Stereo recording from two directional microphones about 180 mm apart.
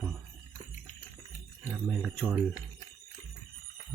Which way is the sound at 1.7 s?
Centre (ahead or behind).